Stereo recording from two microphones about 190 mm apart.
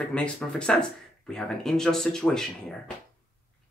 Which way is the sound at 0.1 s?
5° left (ahead or behind).